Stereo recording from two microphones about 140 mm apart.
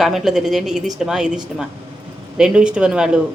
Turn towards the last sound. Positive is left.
turn(degrees=-5)  # may be behind; listen again after turning